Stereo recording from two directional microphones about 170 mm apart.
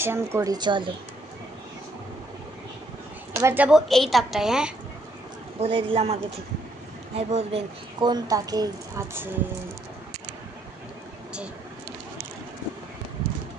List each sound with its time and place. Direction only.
0.0 s a woman's voice: 15° right (ahead or behind)
3.3 s a woman's voice: 15° right (ahead or behind)
5.6 s a woman's voice: 30° right (ahead or behind)
7.2 s a woman's voice: 35° right (ahead or behind)
8.0 s a woman's voice: 20° right (ahead or behind)